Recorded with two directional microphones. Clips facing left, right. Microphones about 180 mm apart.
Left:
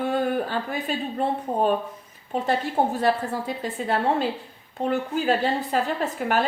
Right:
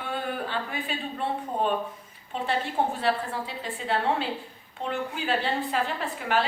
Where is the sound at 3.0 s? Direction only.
45° left (ahead or behind).